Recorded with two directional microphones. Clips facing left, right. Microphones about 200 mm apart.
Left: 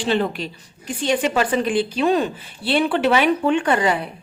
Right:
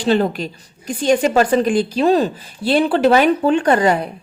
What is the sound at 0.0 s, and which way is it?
A woman's voice, 40° right (ahead or behind).